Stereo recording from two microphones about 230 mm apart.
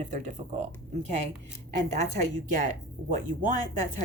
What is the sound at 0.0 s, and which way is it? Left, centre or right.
Speech, right.